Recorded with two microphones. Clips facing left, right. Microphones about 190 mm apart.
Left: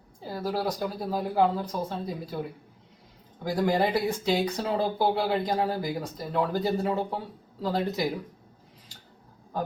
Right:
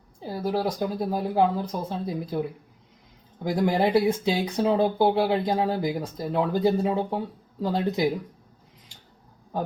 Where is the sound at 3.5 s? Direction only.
20° right (ahead or behind).